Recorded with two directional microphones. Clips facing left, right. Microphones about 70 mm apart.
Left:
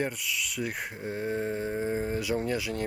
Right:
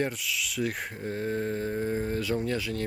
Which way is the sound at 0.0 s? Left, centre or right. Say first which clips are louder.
Right 1 dB; centre.